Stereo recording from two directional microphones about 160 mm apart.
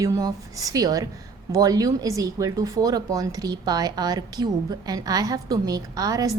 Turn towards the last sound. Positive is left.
turn(degrees=-20)  # may be behind; listen again after turning